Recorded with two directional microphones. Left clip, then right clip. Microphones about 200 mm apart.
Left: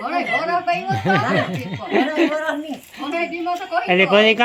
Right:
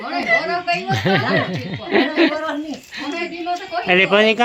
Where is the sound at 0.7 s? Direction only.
5° left (ahead or behind).